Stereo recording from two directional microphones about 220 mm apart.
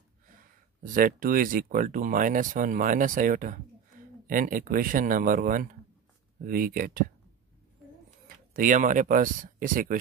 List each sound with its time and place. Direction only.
0.9 s speech: 40° right (ahead or behind)
8.5 s speech: 35° right (ahead or behind)